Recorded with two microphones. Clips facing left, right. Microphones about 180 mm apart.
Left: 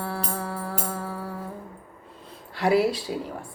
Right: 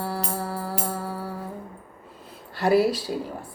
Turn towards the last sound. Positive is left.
turn(degrees=0)  # may be behind; listen again after turning